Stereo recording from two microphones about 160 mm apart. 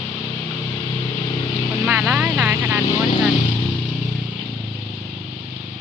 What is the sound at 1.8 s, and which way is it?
Vehicle, 5° right (ahead or behind).